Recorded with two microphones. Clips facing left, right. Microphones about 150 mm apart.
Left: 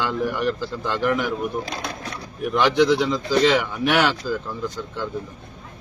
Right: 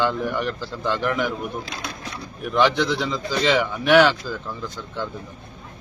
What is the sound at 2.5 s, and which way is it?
Speech, 10° left (ahead or behind).